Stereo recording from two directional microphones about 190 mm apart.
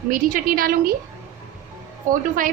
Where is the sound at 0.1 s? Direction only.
50° right (ahead or behind).